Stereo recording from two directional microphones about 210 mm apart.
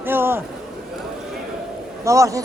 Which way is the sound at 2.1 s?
15° right (ahead or behind).